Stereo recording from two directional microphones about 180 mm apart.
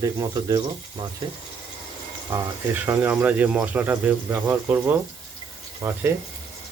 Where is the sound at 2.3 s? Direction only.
10° right (ahead or behind).